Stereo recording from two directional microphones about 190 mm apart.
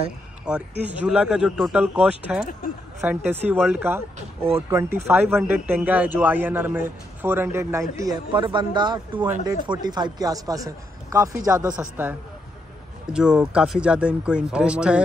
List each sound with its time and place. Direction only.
0.5 s a man's voice: 5° right (ahead or behind)
11.7 s a man's voice: 5° right (ahead or behind)